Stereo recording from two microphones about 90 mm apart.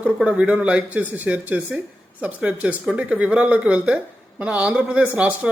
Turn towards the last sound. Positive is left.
turn(degrees=-15)  # may be behind; listen again after turning